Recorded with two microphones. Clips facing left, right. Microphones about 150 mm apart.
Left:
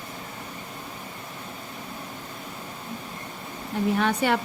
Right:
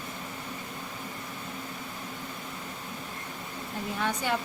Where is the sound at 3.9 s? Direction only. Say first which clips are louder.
Left 4 dB; 75° left (ahead or behind).